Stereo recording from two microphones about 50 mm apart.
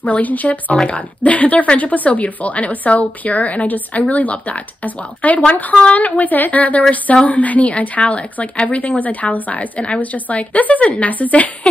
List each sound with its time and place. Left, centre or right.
0.0 s a woman's voice: left